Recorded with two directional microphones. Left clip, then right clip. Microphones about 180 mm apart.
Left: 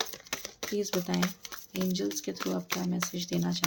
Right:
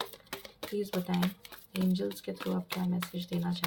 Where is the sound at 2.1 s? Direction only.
45° left (ahead or behind).